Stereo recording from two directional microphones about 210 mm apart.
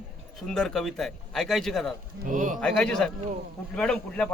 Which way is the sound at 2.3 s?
40° right (ahead or behind).